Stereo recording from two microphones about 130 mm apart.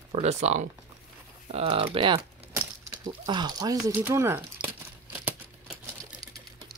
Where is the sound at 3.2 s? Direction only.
30° right (ahead or behind).